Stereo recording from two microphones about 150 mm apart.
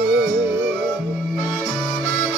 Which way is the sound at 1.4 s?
Centre (ahead or behind).